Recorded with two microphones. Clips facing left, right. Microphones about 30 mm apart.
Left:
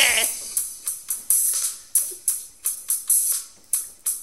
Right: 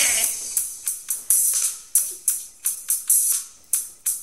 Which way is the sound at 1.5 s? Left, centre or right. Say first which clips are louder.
Right 2 dB; left.